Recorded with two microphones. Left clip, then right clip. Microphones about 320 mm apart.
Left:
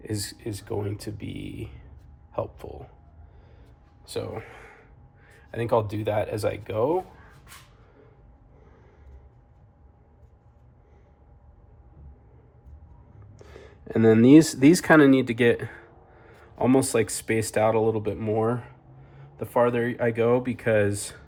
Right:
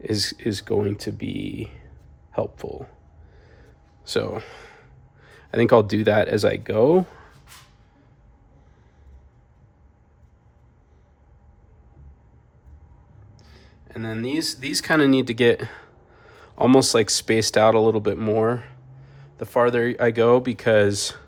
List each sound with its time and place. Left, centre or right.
0.0 s speech: centre; by 2.9 s right
4.0 s speech: right
4.4 s speech: centre; by 7.0 s right
14.8 s speech: centre